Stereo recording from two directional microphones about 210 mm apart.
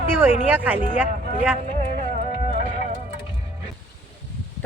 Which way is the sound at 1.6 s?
35° right (ahead or behind).